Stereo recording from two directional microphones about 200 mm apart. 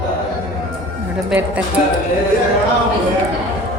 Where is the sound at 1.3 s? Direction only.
5° right (ahead or behind).